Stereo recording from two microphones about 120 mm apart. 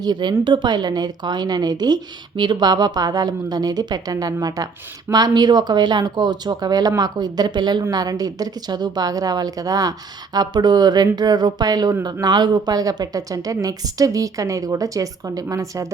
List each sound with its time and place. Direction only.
0.0 s a woman's voice: 40° right (ahead or behind)